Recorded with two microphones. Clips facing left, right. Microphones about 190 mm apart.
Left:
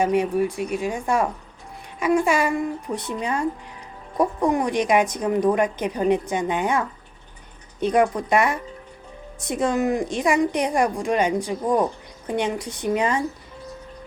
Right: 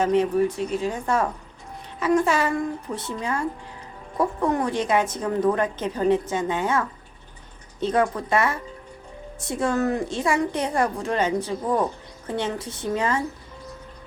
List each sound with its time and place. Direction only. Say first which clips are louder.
0.0 s speech: even; 10° left (ahead or behind)